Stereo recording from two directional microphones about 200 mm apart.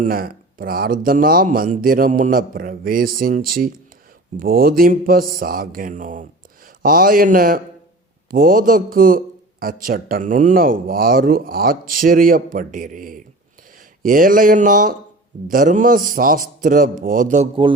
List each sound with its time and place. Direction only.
0.0 s speech: 45° right (ahead or behind)